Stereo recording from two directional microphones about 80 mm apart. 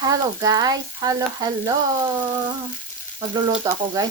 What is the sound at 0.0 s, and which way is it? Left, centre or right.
Frying, right.